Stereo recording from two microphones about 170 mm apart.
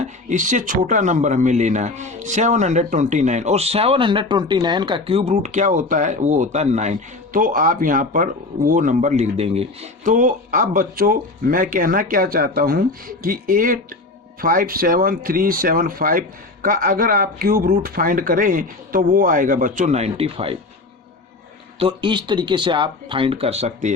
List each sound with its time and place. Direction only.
0.0 s speech: 45° right (ahead or behind)
21.8 s speech: 30° right (ahead or behind)